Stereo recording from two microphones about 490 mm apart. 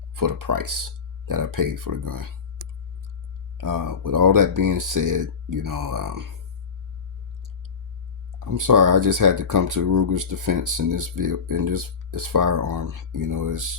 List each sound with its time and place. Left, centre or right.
0.1 s speech: right
3.6 s speech: right
8.4 s speech: right